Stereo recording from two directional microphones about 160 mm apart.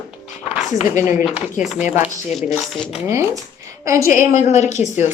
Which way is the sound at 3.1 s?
15° right (ahead or behind).